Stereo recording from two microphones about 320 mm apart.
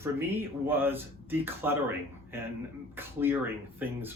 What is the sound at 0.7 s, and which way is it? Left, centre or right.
Speech, centre.